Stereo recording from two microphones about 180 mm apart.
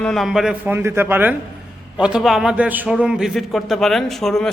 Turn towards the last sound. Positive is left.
turn(degrees=0)  # may be behind; listen again after turning